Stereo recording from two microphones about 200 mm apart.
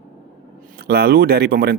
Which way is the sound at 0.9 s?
50° right (ahead or behind).